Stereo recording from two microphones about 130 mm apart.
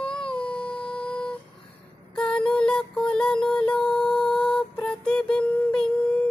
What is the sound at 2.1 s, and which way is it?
Mantra, 10° left (ahead or behind).